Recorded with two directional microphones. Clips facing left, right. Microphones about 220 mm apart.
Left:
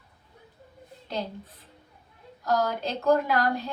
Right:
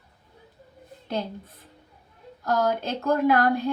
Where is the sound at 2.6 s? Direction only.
55° right (ahead or behind).